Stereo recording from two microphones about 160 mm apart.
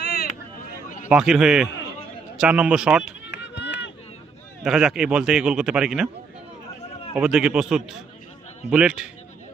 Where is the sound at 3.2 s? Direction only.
90° left.